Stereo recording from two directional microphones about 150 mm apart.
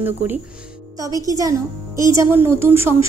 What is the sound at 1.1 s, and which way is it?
A woman's voice, 25° right (ahead or behind).